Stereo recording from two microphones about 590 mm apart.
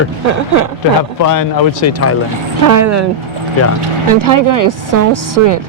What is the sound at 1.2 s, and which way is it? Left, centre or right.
Speech, left.